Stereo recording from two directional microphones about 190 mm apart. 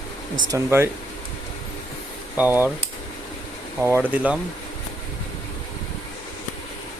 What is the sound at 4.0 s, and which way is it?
Speech, 10° right (ahead or behind).